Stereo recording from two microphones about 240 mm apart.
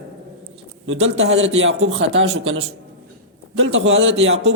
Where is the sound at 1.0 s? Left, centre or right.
Right.